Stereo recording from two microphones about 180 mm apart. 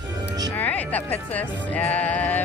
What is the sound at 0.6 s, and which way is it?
Music, 10° left (ahead or behind).